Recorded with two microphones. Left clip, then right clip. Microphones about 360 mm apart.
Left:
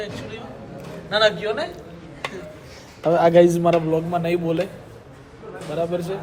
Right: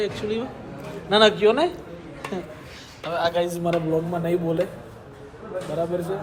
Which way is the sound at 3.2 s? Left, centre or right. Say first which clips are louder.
Left 8 dB; left.